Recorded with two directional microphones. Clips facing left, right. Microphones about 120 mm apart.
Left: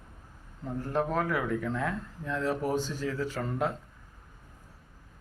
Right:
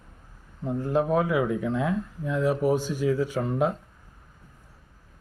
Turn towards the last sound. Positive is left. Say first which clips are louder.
# right 6 dB
turn(degrees=-15)  # may be behind; listen again after turning